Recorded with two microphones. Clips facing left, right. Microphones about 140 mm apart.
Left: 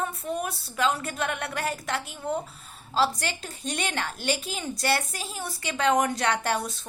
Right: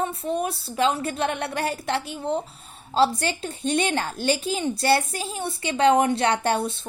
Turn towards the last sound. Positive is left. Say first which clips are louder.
# right 4 dB
turn(degrees=-30)  # may be behind; listen again after turning